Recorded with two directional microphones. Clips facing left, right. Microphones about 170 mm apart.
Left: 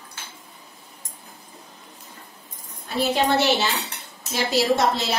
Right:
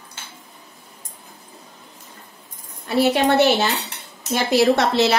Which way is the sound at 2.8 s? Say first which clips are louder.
Right 5 dB; 65° right (ahead or behind).